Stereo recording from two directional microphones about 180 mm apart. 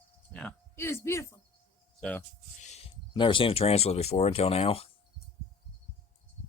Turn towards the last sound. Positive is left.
turn(degrees=35)  # may be behind; listen again after turning